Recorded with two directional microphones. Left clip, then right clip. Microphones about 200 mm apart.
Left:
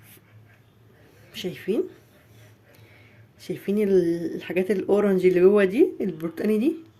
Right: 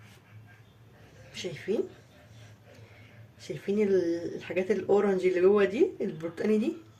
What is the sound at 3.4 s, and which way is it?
Speech, 45° left (ahead or behind).